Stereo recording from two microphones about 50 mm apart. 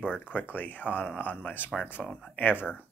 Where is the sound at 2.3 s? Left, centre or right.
Left.